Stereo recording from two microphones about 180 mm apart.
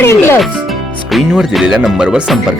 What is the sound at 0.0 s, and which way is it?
Music, 15° left (ahead or behind).